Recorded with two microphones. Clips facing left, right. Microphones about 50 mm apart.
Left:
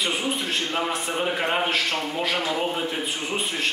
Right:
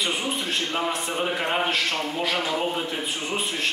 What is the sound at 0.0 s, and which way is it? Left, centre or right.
A man's voice, centre.